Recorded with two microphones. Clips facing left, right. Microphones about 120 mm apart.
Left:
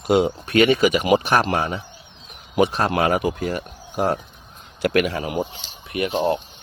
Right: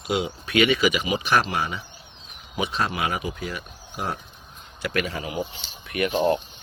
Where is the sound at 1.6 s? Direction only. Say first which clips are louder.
Left 4 dB; 40° left (ahead or behind).